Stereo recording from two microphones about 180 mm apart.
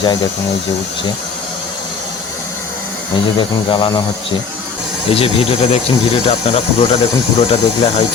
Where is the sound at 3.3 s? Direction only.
25° left (ahead or behind).